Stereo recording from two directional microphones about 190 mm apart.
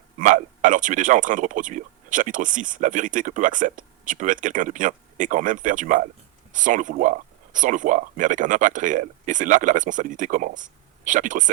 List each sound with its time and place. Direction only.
0.2 s speech: 40° right (ahead or behind)